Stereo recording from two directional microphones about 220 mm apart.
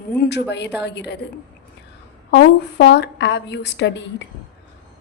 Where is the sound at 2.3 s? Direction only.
50° left (ahead or behind).